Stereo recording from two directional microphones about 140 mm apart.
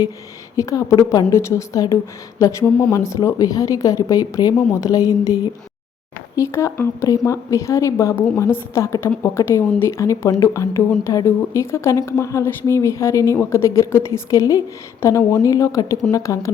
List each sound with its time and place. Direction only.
0.5 s a woman's voice: 25° left (ahead or behind)
2.6 s speech: 10° left (ahead or behind)
2.9 s a woman's voice: 20° left (ahead or behind)